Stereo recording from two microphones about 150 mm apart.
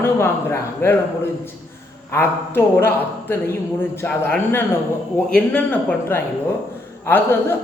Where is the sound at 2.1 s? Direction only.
15° left (ahead or behind).